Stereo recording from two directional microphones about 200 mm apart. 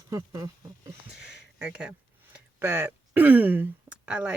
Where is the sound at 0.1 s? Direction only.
15° right (ahead or behind).